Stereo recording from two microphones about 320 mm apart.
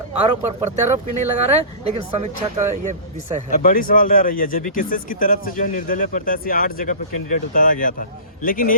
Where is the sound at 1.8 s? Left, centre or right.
Centre.